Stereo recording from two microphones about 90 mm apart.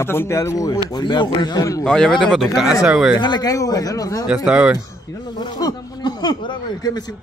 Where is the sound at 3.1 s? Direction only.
55° left (ahead or behind).